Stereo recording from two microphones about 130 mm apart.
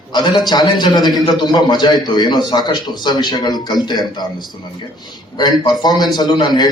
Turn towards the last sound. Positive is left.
turn(degrees=30)  # may be behind; listen again after turning